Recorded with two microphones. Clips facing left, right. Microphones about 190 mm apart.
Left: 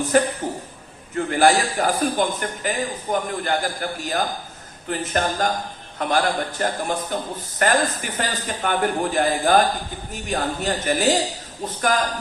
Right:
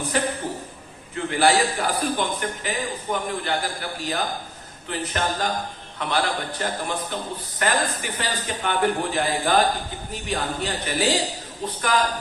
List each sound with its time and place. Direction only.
0.1 s a man's voice: 45° left (ahead or behind)